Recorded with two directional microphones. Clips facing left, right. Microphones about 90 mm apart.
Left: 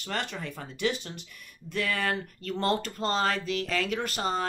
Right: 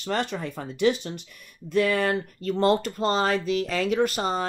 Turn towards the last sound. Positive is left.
turn(degrees=-15)  # may be behind; listen again after turning